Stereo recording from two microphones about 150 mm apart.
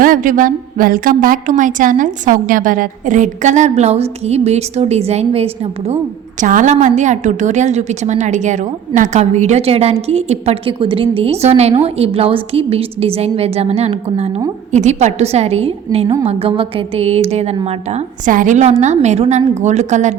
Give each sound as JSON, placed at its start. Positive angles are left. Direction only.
{"t": 0.0, "sound": "a woman's voice", "side_deg": -65}
{"t": 6.4, "sound": "a woman's voice", "side_deg": -60}
{"t": 18.3, "sound": "a woman's voice", "side_deg": -60}